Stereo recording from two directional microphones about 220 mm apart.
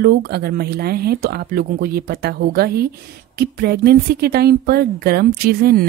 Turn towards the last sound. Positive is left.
turn(degrees=-45)  # may be behind; listen again after turning